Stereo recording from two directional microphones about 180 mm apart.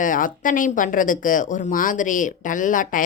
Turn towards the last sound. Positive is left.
turn(degrees=45)  # may be behind; listen again after turning